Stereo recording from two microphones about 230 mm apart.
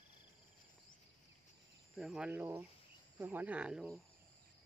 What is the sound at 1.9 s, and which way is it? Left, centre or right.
Speech, centre.